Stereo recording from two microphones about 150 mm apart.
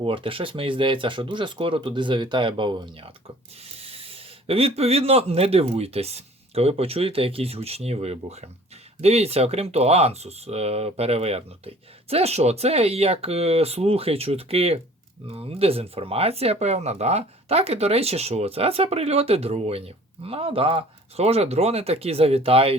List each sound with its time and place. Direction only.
0.0 s speech: 35° right (ahead or behind)